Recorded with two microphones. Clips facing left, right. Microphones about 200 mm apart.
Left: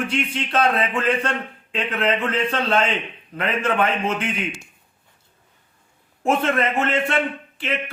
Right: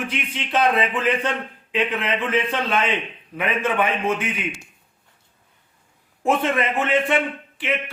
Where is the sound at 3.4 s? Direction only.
15° right (ahead or behind).